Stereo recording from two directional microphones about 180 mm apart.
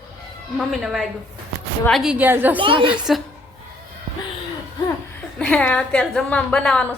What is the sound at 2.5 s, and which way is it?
Speech, 30° right (ahead or behind).